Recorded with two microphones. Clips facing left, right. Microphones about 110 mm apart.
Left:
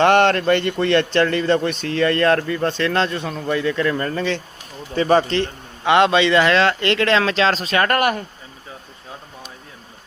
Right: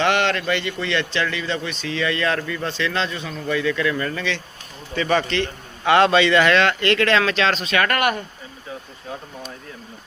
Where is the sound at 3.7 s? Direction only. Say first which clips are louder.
Left 2 dB; 35° left (ahead or behind).